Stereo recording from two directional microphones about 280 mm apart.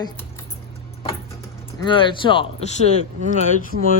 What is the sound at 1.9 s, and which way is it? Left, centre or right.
Speech, centre.